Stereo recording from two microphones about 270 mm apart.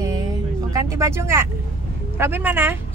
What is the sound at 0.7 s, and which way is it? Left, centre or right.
Speech, centre.